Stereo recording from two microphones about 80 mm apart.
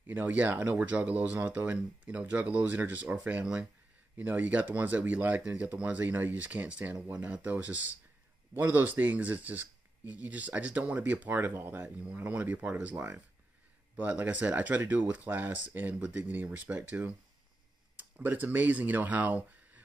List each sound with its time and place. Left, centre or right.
0.0 s speech: right